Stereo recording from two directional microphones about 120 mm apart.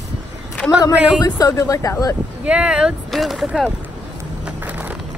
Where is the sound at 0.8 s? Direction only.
30° left (ahead or behind).